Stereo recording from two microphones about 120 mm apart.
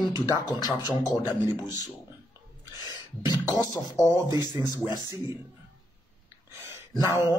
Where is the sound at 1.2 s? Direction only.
20° right (ahead or behind).